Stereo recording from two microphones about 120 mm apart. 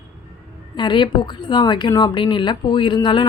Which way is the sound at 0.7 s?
40° left (ahead or behind).